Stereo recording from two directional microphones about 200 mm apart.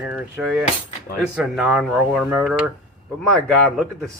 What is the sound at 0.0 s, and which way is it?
A man's voice, 5° right (ahead or behind).